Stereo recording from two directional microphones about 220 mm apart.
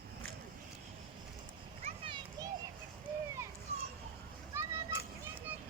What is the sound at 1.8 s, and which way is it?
Children playing, 20° right (ahead or behind).